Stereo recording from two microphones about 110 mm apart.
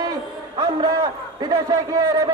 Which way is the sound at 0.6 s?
35° right (ahead or behind).